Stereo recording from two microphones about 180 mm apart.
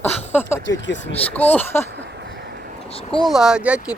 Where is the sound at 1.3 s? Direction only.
10° left (ahead or behind).